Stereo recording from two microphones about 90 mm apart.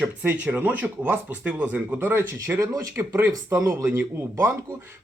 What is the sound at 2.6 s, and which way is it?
Speech, 35° right (ahead or behind).